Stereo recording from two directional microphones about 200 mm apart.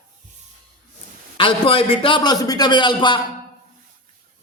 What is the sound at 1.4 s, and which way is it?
A man's voice, 25° left (ahead or behind).